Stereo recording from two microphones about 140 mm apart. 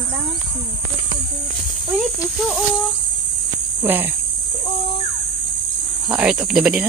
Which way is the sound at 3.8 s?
15° right (ahead or behind).